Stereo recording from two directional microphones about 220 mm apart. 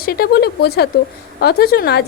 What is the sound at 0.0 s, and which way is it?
A woman's voice, 45° left (ahead or behind).